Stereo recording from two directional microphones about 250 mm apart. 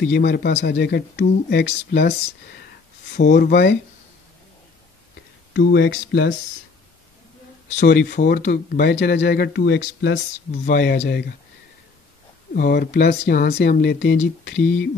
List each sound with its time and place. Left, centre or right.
0.0 s speech: left
3.2 s speech: left
5.5 s speech: left
7.8 s speech: left
12.5 s speech: left